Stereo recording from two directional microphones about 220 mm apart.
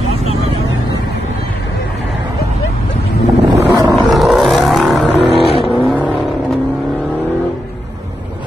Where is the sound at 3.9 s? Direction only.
Centre (ahead or behind).